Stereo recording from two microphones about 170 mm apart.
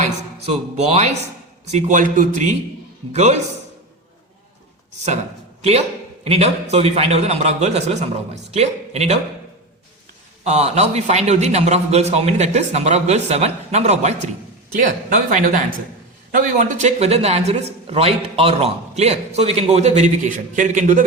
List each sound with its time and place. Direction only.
0.4 s a man's voice: 40° right (ahead or behind)
6.2 s a man's voice: 40° right (ahead or behind)
10.4 s a man's voice: 40° right (ahead or behind)